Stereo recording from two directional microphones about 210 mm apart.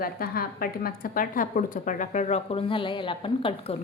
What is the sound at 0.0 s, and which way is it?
A woman's voice, 45° left (ahead or behind).